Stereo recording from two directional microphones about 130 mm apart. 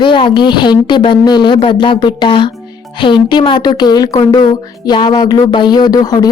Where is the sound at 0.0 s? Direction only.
40° left (ahead or behind).